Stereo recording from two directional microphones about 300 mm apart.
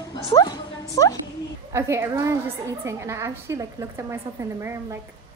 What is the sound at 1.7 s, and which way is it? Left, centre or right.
A woman's voice, centre.